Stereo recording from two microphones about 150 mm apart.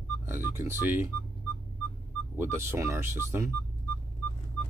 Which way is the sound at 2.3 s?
15° right (ahead or behind).